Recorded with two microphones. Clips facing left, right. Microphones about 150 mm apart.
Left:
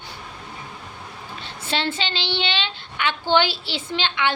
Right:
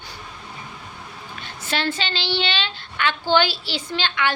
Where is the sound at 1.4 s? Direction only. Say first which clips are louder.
Even; 25° left (ahead or behind).